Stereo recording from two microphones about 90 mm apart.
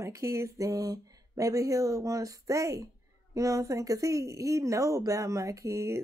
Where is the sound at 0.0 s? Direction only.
35° right (ahead or behind).